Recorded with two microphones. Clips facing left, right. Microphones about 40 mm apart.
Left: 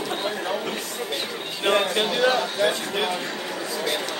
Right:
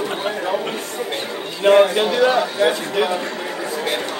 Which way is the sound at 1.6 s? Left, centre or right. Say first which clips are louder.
Right 8 dB; centre.